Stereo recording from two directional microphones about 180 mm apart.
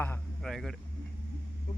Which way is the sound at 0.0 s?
5° left (ahead or behind).